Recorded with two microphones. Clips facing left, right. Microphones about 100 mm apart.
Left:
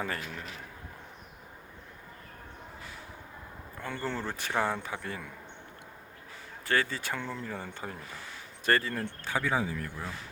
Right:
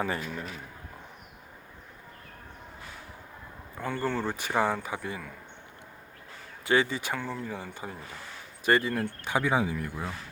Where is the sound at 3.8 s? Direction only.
10° right (ahead or behind).